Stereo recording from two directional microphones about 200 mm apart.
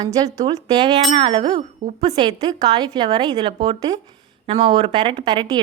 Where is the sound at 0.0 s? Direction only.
15° right (ahead or behind).